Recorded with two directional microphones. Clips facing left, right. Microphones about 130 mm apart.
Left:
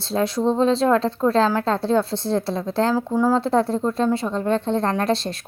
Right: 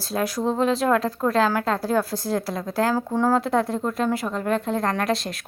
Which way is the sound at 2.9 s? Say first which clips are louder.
Left 2 dB; 10° left (ahead or behind).